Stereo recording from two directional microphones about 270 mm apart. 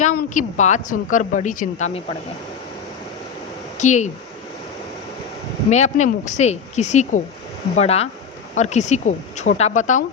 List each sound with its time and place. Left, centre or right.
0.0 s a woman's voice: left
3.8 s a woman's voice: left
5.7 s a woman's voice: left